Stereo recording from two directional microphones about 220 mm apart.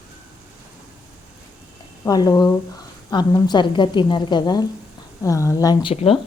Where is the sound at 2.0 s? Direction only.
15° left (ahead or behind).